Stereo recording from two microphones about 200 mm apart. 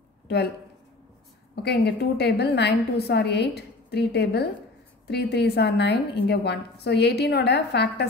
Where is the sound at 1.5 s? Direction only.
55° left (ahead or behind).